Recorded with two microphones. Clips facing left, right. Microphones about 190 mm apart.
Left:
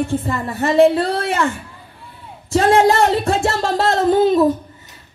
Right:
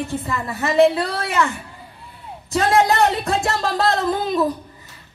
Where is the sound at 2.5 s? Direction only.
30° left (ahead or behind).